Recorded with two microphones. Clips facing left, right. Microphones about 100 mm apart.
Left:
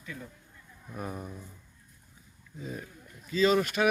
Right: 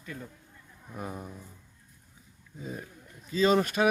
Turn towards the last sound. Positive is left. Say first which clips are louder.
# right 1 dB
turn(degrees=-30)  # may be behind; listen again after turning